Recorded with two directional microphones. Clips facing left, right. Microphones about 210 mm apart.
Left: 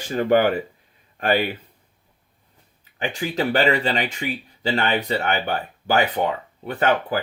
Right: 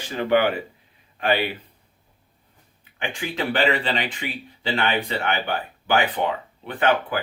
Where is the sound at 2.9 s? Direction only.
40° left (ahead or behind).